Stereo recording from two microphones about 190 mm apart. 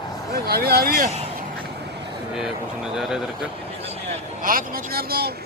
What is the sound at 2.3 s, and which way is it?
Speech, 5° right (ahead or behind).